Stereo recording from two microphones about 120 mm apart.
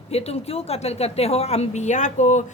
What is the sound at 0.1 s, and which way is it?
A woman's voice, 60° left (ahead or behind).